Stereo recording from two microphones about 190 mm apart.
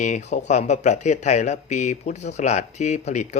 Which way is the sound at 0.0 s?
40° left (ahead or behind).